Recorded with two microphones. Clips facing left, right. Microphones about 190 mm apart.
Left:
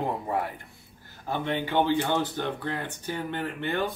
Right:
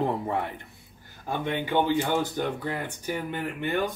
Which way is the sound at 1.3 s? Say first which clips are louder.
Even; 15° right (ahead or behind).